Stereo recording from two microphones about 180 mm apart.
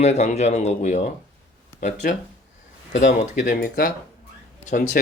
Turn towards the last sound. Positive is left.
turn(degrees=45)  # may be behind; listen again after turning